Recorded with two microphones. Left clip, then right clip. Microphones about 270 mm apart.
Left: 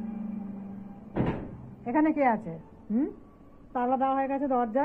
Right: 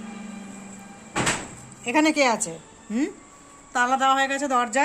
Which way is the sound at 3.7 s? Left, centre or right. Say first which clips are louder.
Right 6 dB; centre.